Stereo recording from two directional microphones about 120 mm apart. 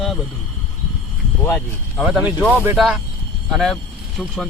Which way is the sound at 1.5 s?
Centre (ahead or behind).